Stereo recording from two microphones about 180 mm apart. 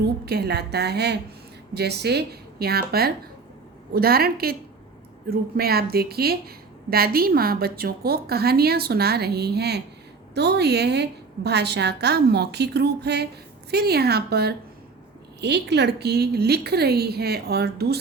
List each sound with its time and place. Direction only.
0.3 s a woman's voice: 60° right (ahead or behind)